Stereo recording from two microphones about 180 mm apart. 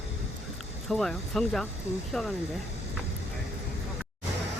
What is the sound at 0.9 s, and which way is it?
Speech, centre (ahead or behind).